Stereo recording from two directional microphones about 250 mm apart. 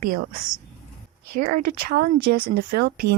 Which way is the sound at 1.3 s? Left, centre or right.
Right.